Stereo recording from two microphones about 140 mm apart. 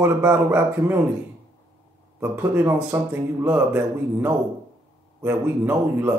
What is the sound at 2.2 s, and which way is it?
Speech, 15° right (ahead or behind).